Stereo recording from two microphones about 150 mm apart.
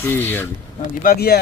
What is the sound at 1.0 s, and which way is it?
Speech, 85° left.